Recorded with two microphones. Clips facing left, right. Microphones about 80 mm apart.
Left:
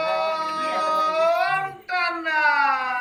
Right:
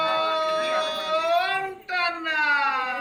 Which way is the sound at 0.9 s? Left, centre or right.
Centre.